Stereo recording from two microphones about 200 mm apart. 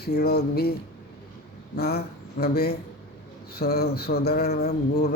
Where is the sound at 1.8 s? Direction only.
50° left (ahead or behind).